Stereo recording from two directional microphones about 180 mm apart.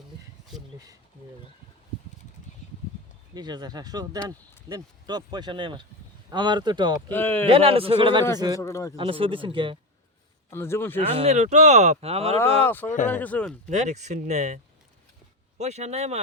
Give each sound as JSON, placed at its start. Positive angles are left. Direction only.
{"t": 3.3, "sound": "speech", "side_deg": -20}
{"t": 7.1, "sound": "speech", "side_deg": 10}
{"t": 7.4, "sound": "speech", "side_deg": -30}
{"t": 8.5, "sound": "speech", "side_deg": 15}
{"t": 9.0, "sound": "speech", "side_deg": -30}
{"t": 10.5, "sound": "speech", "side_deg": 15}
{"t": 11.2, "sound": "speech", "side_deg": -35}
{"t": 12.6, "sound": "speech", "side_deg": 10}
{"t": 13.7, "sound": "speech", "side_deg": -40}